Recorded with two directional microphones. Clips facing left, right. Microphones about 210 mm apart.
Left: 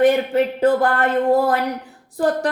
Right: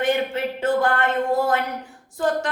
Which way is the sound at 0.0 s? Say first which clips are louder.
Left 7 dB; 35° left (ahead or behind).